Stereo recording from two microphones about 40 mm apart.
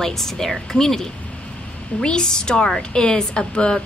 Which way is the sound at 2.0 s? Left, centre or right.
Centre.